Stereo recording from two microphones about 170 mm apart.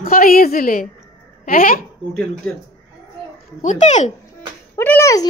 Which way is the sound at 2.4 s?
5° left (ahead or behind).